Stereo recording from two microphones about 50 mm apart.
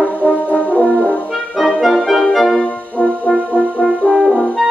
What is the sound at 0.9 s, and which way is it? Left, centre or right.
Brass instrument, left.